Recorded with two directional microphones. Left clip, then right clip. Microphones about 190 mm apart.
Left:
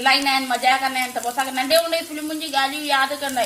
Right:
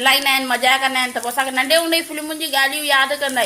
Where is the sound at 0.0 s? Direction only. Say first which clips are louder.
Right 2 dB; 45° right (ahead or behind).